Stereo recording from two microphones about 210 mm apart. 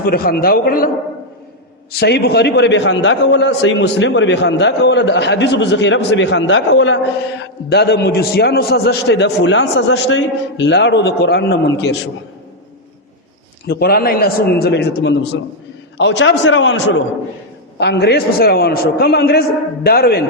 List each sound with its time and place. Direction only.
0.0 s a man's voice: 45° left (ahead or behind)
1.9 s a man's voice: 50° left (ahead or behind)
7.7 s a man's voice: 50° left (ahead or behind)
13.7 s a man's voice: 50° left (ahead or behind)